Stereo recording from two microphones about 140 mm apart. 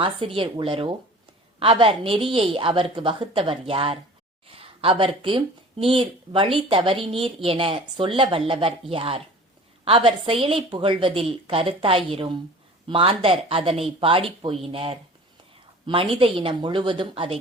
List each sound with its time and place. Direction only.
0.0 s speech: 40° right (ahead or behind)